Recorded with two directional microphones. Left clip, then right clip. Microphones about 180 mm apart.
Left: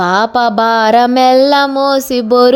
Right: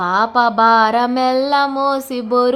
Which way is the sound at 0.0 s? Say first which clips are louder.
Left 3 dB; 35° left (ahead or behind).